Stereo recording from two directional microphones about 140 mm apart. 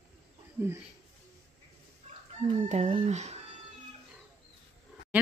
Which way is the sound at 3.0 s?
55° right (ahead or behind).